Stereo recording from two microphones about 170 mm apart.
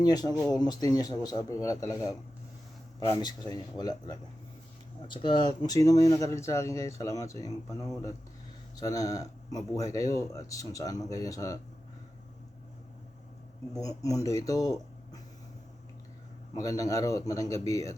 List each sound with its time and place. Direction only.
0.0 s speech: 25° left (ahead or behind)
13.7 s speech: 20° left (ahead or behind)
16.6 s speech: 20° left (ahead or behind)